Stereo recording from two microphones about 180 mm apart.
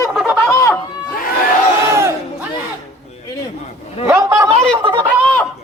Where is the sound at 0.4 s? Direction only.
15° left (ahead or behind).